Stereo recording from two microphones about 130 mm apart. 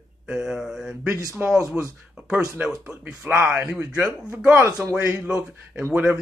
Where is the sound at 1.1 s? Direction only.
20° right (ahead or behind).